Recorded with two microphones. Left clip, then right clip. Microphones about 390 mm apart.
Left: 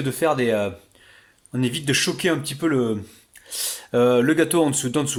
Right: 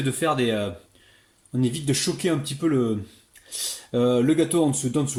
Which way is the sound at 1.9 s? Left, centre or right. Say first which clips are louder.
Left 5 dB; centre.